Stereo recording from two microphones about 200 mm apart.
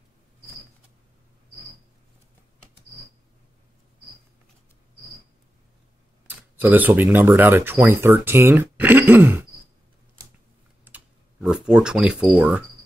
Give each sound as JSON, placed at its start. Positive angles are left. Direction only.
{"t": 6.2, "sound": "speech", "side_deg": -10}
{"t": 10.9, "sound": "typing", "side_deg": -10}
{"t": 11.4, "sound": "speech", "side_deg": -5}